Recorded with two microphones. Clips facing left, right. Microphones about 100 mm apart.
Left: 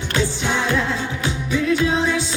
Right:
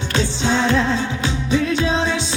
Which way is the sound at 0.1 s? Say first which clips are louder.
Right 2 dB; 20° right (ahead or behind).